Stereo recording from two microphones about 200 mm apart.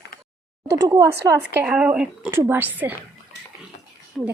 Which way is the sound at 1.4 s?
10° right (ahead or behind).